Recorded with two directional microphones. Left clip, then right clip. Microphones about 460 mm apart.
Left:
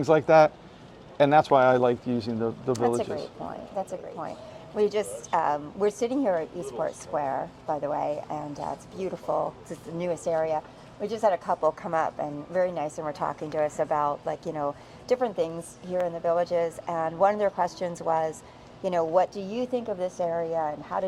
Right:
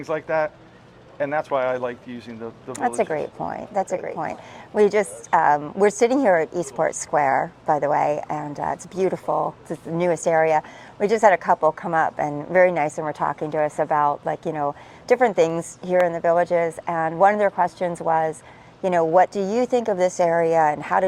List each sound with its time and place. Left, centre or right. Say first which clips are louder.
0.0 s speech: left 5 dB; left
2.8 s speech: right 7 dB; right
9.2 s speech: right 5 dB; right
10.1 s a woman's voice: right 8 dB; right
11.6 s speech: right 6 dB; right